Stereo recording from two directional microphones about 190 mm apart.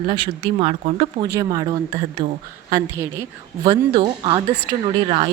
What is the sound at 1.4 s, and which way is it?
Speech, 20° right (ahead or behind).